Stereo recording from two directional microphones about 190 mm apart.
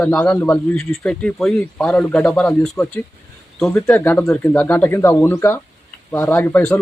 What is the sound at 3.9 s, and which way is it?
A man's voice, 10° left (ahead or behind).